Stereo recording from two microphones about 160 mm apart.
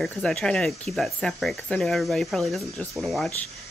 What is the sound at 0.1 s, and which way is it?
A woman's voice, 5° left (ahead or behind).